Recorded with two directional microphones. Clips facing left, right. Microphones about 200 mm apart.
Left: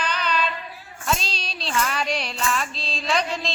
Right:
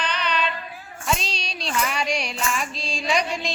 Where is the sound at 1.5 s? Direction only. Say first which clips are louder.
Right 1 dB; 30° left (ahead or behind).